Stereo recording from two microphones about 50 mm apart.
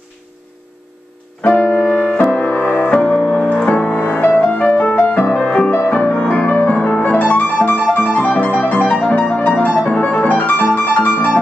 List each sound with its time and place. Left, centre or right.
1.6 s piano: left
1.9 s music: left
2.4 s music: left
2.9 s music: left
5.7 s music: left
7.6 s piano: left
8.8 s music: left
9.4 s music: left
9.8 s piano: left